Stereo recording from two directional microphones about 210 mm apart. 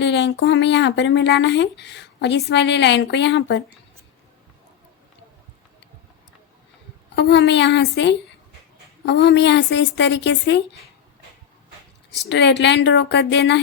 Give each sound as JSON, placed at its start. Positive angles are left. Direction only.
{"t": 0.0, "sound": "speech", "side_deg": 55}
{"t": 7.2, "sound": "speech", "side_deg": 55}
{"t": 12.1, "sound": "speech", "side_deg": 55}